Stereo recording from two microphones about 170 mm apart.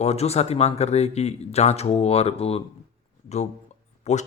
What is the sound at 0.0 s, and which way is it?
Speech, 40° left (ahead or behind).